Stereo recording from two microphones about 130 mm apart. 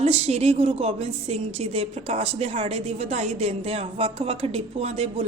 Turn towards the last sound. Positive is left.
turn(degrees=-50)  # may be behind; listen again after turning